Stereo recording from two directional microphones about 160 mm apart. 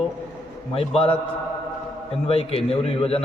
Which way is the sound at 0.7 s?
35° left (ahead or behind).